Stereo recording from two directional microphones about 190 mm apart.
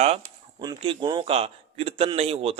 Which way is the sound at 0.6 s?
25° right (ahead or behind).